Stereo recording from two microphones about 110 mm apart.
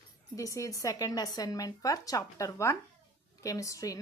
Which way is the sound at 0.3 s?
30° left (ahead or behind).